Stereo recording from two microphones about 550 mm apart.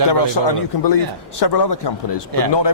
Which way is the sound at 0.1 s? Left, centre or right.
Left.